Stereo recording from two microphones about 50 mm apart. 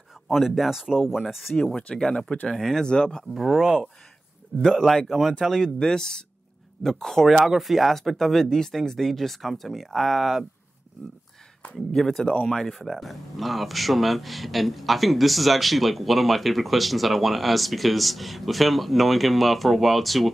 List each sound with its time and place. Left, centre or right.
0.3 s speech: centre
1.5 s speech: centre
2.8 s speech: centre
4.7 s speech: centre
7.2 s speech: centre
11.9 s speech: centre